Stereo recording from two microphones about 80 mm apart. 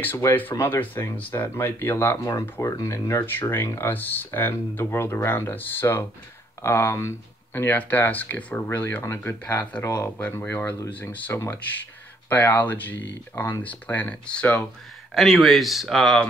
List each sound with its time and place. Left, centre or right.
0.3 s speech: left
8.6 s speech: left; by 14.6 s centre
15.1 s speech: centre